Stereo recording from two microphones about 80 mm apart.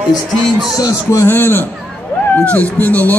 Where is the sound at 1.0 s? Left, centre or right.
Left.